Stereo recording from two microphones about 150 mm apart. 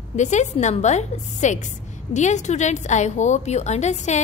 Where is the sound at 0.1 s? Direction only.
50° left (ahead or behind).